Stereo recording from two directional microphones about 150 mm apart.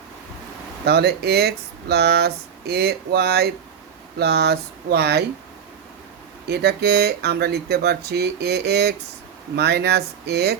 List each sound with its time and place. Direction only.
0.9 s speech: 90° right
6.5 s speech: 90° right